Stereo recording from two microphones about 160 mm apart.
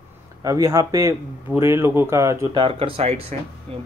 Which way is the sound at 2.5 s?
30° right (ahead or behind).